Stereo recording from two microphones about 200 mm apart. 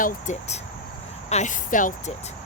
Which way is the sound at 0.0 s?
35° left (ahead or behind).